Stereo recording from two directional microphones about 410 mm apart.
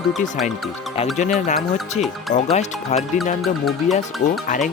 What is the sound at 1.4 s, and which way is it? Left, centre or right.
Speech, centre.